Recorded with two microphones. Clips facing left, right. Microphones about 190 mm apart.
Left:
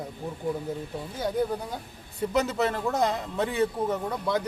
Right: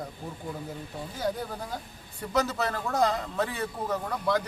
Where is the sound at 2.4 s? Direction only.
20° left (ahead or behind).